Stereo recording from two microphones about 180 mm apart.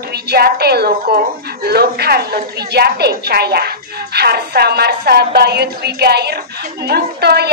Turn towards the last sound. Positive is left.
turn(degrees=-65)  # may be behind; listen again after turning